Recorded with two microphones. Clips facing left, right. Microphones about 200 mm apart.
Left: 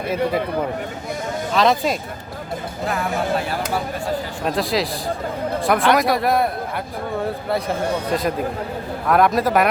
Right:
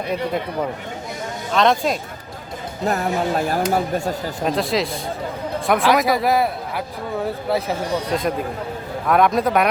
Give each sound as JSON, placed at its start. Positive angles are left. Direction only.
{"t": 1.5, "sound": "speech", "side_deg": 0}
{"t": 2.8, "sound": "speech", "side_deg": -40}
{"t": 4.4, "sound": "speech", "side_deg": 0}